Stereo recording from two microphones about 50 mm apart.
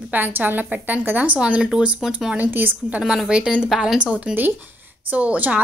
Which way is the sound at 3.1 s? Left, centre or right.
Centre.